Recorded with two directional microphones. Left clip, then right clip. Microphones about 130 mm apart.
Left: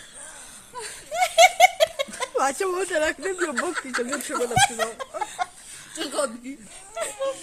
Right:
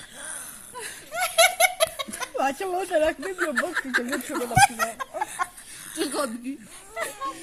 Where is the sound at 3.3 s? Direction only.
10° right (ahead or behind).